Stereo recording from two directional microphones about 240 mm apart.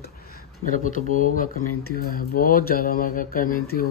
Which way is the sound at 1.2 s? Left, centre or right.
Left.